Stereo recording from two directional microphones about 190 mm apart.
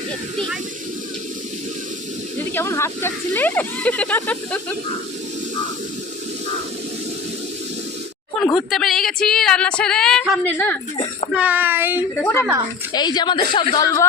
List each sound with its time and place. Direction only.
2.6 s speech: 15° left (ahead or behind)
8.4 s a woman's voice: centre (ahead or behind)
11.3 s speech: 10° right (ahead or behind)
12.2 s a woman's voice: 10° left (ahead or behind)